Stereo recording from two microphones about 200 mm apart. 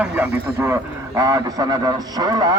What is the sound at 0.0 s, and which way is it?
Speech, 10° right (ahead or behind).